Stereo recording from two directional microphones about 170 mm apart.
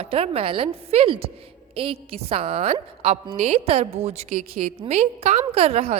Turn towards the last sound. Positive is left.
turn(degrees=-35)  # may be behind; listen again after turning